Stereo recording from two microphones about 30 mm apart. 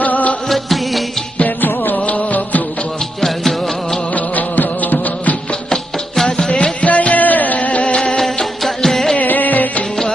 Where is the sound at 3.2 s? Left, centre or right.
Centre.